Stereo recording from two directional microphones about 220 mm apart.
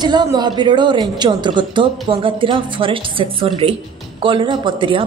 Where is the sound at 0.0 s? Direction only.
20° right (ahead or behind).